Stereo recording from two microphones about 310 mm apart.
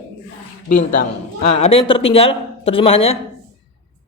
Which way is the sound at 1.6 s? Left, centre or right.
Centre.